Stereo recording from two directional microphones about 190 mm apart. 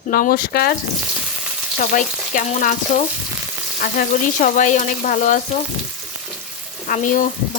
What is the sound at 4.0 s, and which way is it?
Speech, 40° left (ahead or behind).